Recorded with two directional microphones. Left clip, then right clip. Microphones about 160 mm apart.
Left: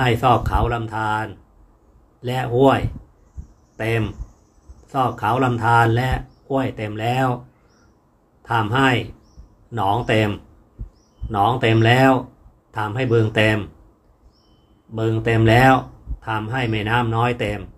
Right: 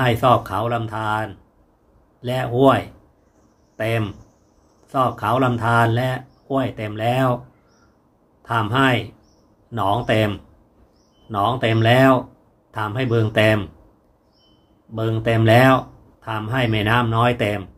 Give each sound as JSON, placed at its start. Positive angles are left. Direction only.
{"t": 0.0, "sound": "speech", "side_deg": -15}
{"t": 8.4, "sound": "speech", "side_deg": -15}
{"t": 15.0, "sound": "speech", "side_deg": -15}